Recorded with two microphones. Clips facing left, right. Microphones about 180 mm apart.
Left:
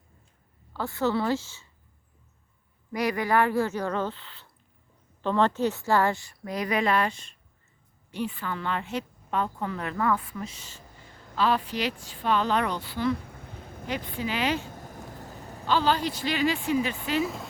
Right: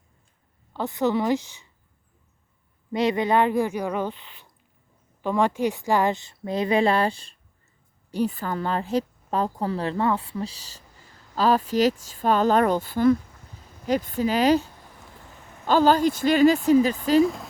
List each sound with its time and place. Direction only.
0.7 s a woman's voice: 20° right (ahead or behind)
2.9 s a woman's voice: 25° right (ahead or behind); by 13.1 s 45° right (ahead or behind)
13.2 s a sound: 55° left (ahead or behind)
13.8 s a woman's voice: 40° right (ahead or behind)
14.8 s a sound: 40° left (ahead or behind)
15.6 s a woman's voice: 45° right (ahead or behind)
17.2 s speech: centre (ahead or behind)